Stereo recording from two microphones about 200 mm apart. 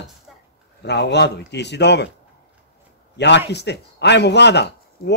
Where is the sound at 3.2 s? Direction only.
60° left (ahead or behind).